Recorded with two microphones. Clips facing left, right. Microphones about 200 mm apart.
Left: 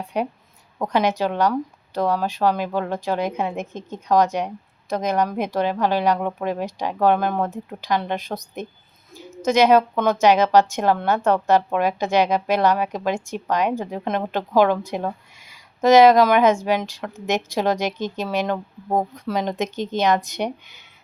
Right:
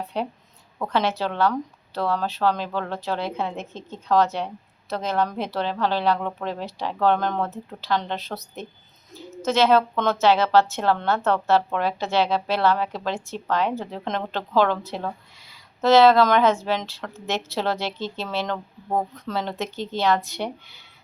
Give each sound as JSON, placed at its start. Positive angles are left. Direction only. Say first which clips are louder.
{"t": 0.0, "sound": "a woman's voice", "louder": "left 3 dB", "side_deg": 15}